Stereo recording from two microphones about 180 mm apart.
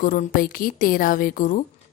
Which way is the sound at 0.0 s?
50° left (ahead or behind).